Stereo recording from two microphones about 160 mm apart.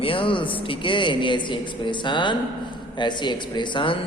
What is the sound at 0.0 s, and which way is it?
Speech, 35° left (ahead or behind).